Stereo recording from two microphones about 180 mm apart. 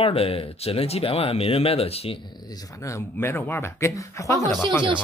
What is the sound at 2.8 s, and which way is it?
A woman's voice, 15° left (ahead or behind).